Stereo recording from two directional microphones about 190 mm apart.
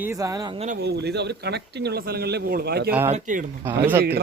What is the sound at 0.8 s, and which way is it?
Speech, 60° right (ahead or behind).